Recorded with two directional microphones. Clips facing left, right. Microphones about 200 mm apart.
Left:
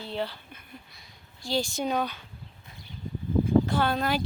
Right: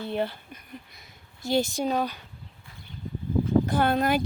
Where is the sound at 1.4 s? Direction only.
20° right (ahead or behind).